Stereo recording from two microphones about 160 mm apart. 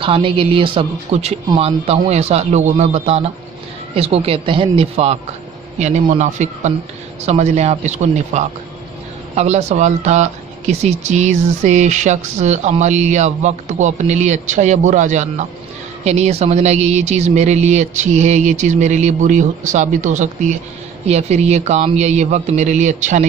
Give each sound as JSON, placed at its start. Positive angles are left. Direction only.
{"t": 0.0, "sound": "a man's voice", "side_deg": -35}